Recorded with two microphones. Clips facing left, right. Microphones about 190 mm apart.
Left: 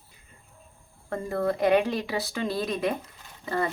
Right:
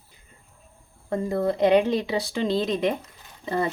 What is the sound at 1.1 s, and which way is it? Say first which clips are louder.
Speech: right 3 dB; 15° right (ahead or behind).